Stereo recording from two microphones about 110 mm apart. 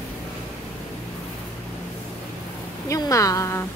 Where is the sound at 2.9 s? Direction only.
30° left (ahead or behind).